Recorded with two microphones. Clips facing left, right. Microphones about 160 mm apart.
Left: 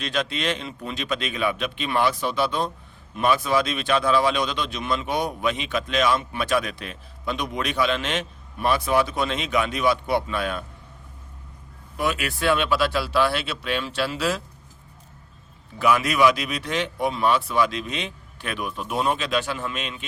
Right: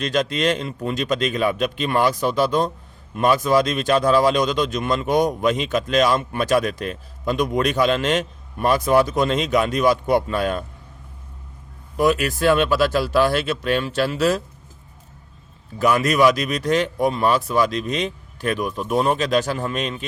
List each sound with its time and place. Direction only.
0.0 s speech: 45° right (ahead or behind)
11.9 s speech: 40° right (ahead or behind)
15.8 s speech: 45° right (ahead or behind)